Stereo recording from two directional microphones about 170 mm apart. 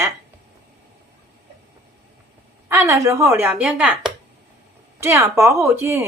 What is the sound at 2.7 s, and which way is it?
A woman's voice, 15° right (ahead or behind).